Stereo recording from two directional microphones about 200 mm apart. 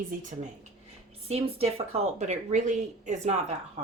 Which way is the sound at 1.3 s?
30° right (ahead or behind).